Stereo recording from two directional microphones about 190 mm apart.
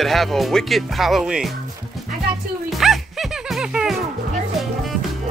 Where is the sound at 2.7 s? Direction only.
Centre (ahead or behind).